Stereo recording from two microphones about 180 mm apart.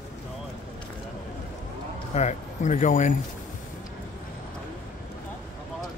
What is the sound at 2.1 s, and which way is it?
Speech, 40° left (ahead or behind).